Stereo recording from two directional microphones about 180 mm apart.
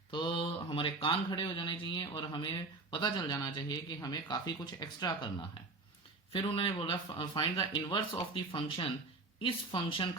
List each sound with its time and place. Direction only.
0.1 s speech: 25° left (ahead or behind)
6.3 s speech: 30° left (ahead or behind)